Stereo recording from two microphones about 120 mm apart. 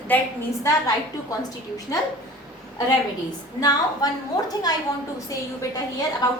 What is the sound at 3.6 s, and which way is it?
A woman's voice, 30° left (ahead or behind).